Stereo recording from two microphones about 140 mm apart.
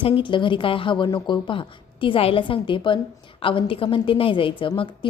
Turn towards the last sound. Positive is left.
turn(degrees=40)  # may be behind; listen again after turning